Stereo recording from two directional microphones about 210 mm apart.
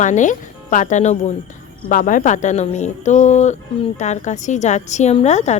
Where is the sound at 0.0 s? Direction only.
35° left (ahead or behind).